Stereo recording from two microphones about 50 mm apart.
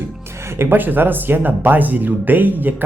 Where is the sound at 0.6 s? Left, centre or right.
Right.